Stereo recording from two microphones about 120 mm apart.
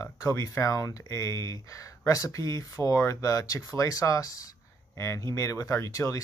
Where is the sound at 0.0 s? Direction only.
25° left (ahead or behind).